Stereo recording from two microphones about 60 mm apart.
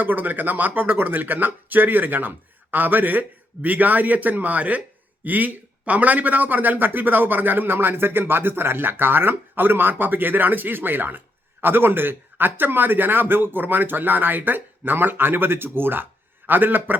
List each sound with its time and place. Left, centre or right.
0.0 s a man's voice: right